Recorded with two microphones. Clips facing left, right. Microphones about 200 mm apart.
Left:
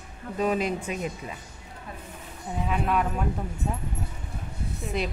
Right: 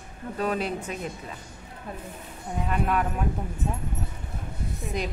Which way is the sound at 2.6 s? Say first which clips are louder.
Even; centre (ahead or behind).